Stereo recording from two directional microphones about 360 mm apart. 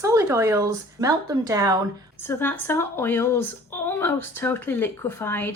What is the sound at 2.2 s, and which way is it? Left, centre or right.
A woman's voice, centre.